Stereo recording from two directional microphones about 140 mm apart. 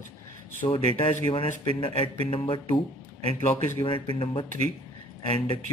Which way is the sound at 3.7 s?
35° left (ahead or behind).